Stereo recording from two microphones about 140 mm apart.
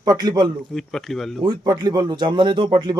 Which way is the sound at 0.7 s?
Centre (ahead or behind).